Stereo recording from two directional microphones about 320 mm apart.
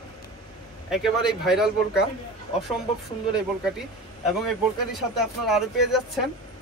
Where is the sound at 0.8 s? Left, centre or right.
Centre.